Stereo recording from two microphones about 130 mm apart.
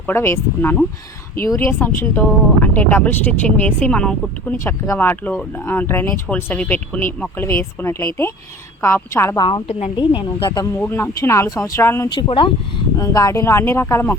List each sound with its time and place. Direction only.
0.0 s speech: 20° left (ahead or behind)
4.5 s speech: 20° left (ahead or behind)
9.3 s a woman's voice: 35° left (ahead or behind)
9.6 s a woman's voice: 55° left (ahead or behind)
10.2 s a woman's voice: 35° left (ahead or behind)
10.8 s speech: 15° left (ahead or behind)
12.1 s a woman's voice: 40° left (ahead or behind)
13.0 s speech: 25° left (ahead or behind)